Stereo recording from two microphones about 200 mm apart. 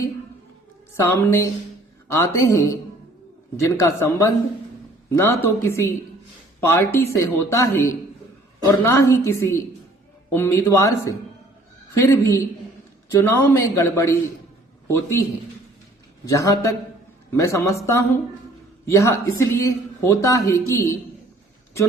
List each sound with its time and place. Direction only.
0.9 s a man's voice: 10° left (ahead or behind)